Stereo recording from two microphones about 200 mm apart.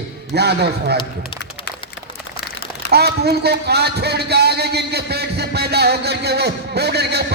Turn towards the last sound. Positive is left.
turn(degrees=-55)  # may be behind; listen again after turning